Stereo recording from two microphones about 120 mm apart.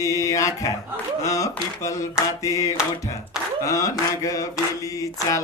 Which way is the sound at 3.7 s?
25° left (ahead or behind).